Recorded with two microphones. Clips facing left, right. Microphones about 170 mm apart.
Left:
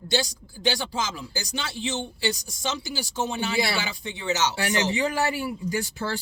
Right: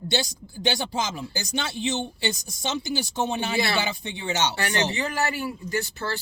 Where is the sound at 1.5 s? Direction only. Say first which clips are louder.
Right 3 dB; 25° right (ahead or behind).